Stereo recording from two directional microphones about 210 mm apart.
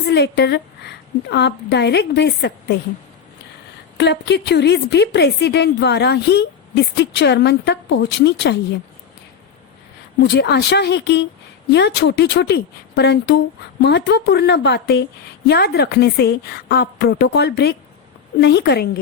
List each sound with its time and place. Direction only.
0.0 s a woman's voice: 55° left (ahead or behind)
3.9 s a woman's voice: 55° left (ahead or behind)
10.2 s a woman's voice: 50° left (ahead or behind)